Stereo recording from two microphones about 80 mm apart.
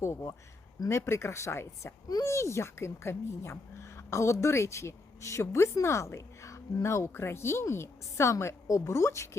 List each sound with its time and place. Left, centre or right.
0.0 s speech: left